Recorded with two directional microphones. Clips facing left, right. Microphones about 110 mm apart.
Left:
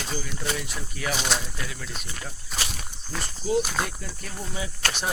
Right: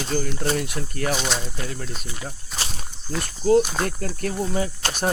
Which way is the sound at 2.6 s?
30° right (ahead or behind).